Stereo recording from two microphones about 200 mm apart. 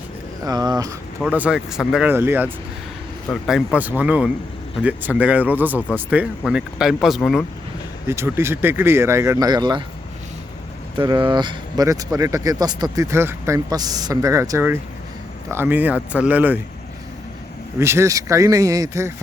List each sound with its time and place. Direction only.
0.4 s speech: 20° right (ahead or behind)
1.2 s speech: 5° right (ahead or behind)
8.0 s speech: 10° right (ahead or behind)
10.9 s speech: 25° right (ahead or behind); by 16.6 s 10° right (ahead or behind)
17.7 s speech: 15° right (ahead or behind)